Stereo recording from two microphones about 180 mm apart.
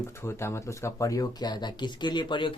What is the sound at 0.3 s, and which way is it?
Speech, 15° left (ahead or behind).